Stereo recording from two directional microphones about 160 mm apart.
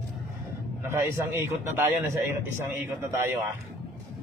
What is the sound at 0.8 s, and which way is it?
A man's voice, 15° right (ahead or behind).